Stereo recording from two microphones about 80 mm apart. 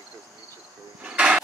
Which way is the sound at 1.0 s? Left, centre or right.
Centre.